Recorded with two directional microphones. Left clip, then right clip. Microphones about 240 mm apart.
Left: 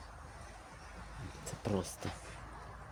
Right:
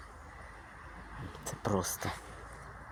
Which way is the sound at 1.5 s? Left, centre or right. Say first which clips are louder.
Right 5 dB; centre.